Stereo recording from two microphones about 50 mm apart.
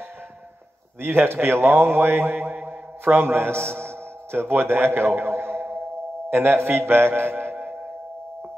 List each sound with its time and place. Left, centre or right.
1.0 s a man's voice: right
3.7 s a sound: right
6.3 s a man's voice: right